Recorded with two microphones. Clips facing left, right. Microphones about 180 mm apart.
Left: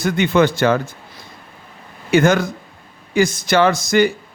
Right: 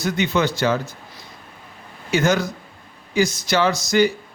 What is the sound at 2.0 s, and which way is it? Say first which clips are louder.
A man's voice: left 5 dB; 55° left (ahead or behind).